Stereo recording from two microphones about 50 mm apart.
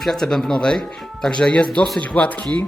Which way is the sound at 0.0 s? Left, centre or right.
Centre.